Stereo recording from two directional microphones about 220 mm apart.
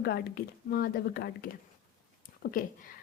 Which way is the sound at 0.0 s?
45° left (ahead or behind).